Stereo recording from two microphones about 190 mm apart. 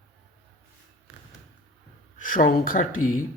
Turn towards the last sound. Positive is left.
turn(degrees=45)  # may be behind; listen again after turning